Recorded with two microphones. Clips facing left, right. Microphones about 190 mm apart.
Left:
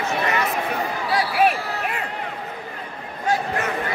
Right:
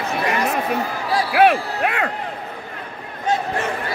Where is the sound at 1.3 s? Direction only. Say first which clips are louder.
Right 8 dB; 85° right.